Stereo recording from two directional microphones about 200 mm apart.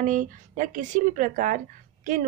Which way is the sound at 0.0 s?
40° right (ahead or behind).